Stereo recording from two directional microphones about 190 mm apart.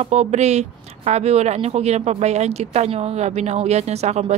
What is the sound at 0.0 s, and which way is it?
A woman's voice, 35° right (ahead or behind).